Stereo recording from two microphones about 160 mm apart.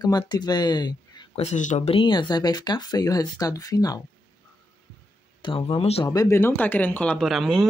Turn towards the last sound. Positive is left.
turn(degrees=0)  # may be behind; listen again after turning